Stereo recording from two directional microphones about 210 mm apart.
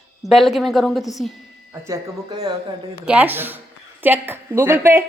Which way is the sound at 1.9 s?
15° right (ahead or behind).